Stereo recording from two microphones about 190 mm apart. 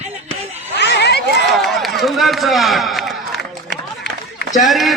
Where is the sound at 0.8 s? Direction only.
60° left (ahead or behind).